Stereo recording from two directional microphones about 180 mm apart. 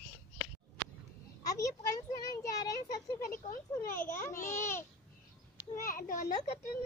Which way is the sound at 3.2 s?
55° left (ahead or behind).